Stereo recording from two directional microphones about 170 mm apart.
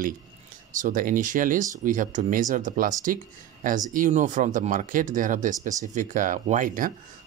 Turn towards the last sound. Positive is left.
turn(degrees=-50)  # may be behind; listen again after turning